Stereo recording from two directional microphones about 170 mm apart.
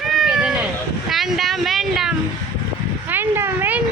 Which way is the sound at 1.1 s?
Centre (ahead or behind).